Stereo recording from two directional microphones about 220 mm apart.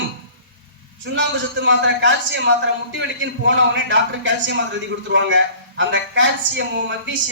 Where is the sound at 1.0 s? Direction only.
55° right (ahead or behind).